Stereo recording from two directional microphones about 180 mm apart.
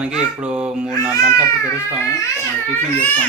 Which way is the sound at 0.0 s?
5° right (ahead or behind).